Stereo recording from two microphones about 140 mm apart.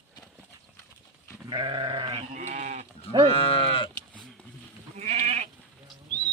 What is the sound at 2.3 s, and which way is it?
Sheep, 60° right (ahead or behind).